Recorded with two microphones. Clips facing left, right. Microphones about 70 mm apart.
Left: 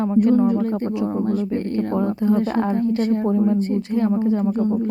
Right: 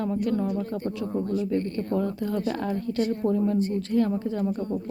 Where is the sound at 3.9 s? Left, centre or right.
Left.